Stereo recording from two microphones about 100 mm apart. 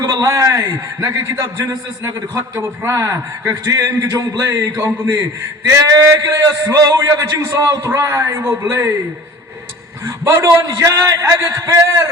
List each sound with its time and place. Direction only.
0.0 s a man's voice: 35° right (ahead or behind)
10.2 s a man's voice: 30° right (ahead or behind)